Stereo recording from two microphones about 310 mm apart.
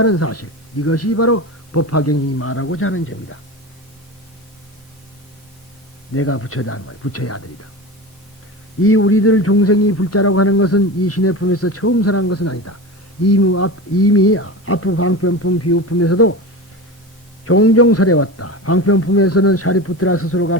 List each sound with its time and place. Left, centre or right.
0.0 s a man's voice: left
6.1 s a man's voice: left
8.8 s a man's voice: left
17.4 s a man's voice: left